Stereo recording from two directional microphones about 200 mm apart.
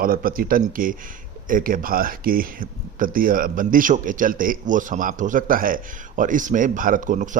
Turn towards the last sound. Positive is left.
turn(degrees=-40)  # may be behind; listen again after turning